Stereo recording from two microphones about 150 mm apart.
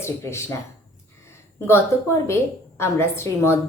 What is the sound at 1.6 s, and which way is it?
A woman's voice, 15° left (ahead or behind).